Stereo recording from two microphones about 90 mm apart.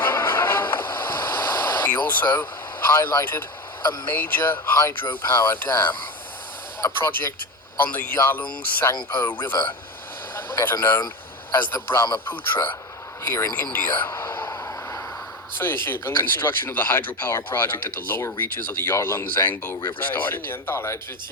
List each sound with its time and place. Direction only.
0.0 s a sound: 25° left (ahead or behind)
4.1 s speech: 20° left (ahead or behind)
7.0 s speech: 25° left (ahead or behind)
14.1 s vehicle: 35° left (ahead or behind)
15.6 s speech: 25° left (ahead or behind)